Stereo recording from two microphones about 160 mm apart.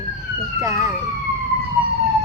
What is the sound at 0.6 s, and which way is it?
Speech, 20° right (ahead or behind).